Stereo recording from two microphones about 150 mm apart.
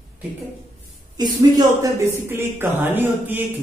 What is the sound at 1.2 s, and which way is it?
A man's voice, 25° right (ahead or behind).